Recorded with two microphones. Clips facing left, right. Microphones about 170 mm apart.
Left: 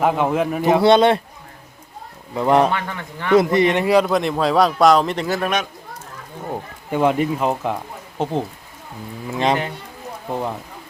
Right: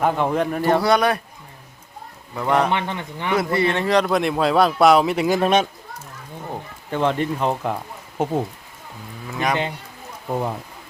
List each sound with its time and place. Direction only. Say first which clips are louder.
0.0 s speech: left 2 dB; 5° left (ahead or behind)
0.8 s a man's voice: left 5 dB; 25° left (ahead or behind)
2.3 s a man's voice: left 4 dB; 20° left (ahead or behind)
2.6 s speech: even; 20° right (ahead or behind)
3.3 s speech: left 6 dB; 20° left (ahead or behind); by 5.4 s 10° right (ahead or behind)
5.4 s speech: right 4 dB; 30° right (ahead or behind)
6.5 s speech: left 4 dB; 10° left (ahead or behind)
8.2 s speech: even; 10° right (ahead or behind)
9.3 s a man's voice: left 4 dB; 25° left (ahead or behind)
10.3 s speech: right 1 dB; centre (ahead or behind)